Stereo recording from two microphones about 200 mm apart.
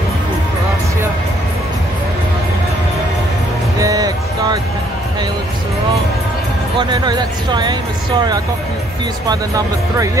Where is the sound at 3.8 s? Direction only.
20° right (ahead or behind).